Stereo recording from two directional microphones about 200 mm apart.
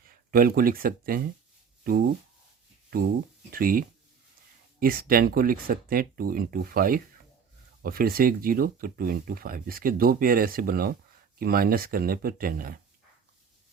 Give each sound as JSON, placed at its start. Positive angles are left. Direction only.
{"t": 0.1, "sound": "speech", "side_deg": -45}
{"t": 3.5, "sound": "speech", "side_deg": -45}